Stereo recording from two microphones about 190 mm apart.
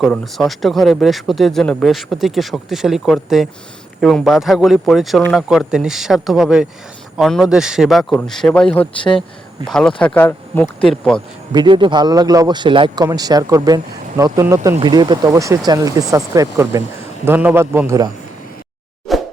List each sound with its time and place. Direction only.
0.0 s speech: centre (ahead or behind)
11.5 s a man's voice: 25° right (ahead or behind)
19.1 s plop: centre (ahead or behind)